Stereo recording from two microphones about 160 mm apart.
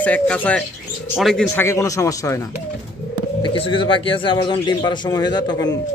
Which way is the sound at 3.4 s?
30° left (ahead or behind).